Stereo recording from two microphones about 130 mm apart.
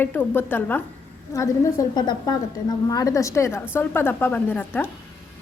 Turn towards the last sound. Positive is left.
turn(degrees=15)  # may be behind; listen again after turning